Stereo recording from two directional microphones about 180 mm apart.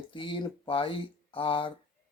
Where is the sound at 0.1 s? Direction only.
25° left (ahead or behind).